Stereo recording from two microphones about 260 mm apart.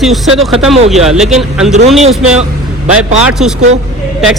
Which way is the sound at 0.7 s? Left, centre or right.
Right.